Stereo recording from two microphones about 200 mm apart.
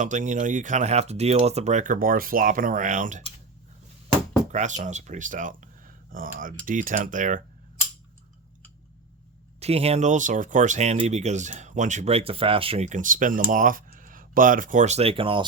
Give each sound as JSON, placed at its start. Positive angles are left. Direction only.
{"t": 0.0, "sound": "speech", "side_deg": -40}
{"t": 4.5, "sound": "speech", "side_deg": -35}
{"t": 9.6, "sound": "speech", "side_deg": -30}